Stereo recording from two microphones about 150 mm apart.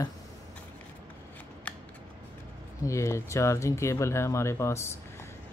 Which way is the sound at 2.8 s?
20° left (ahead or behind).